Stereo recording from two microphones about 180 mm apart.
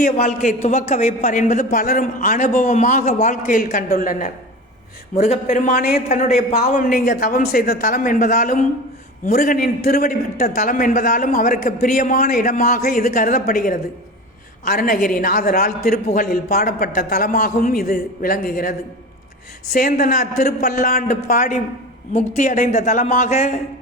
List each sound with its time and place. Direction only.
0.0 s a man's voice: 45° left (ahead or behind)
19.7 s a man's voice: 50° left (ahead or behind)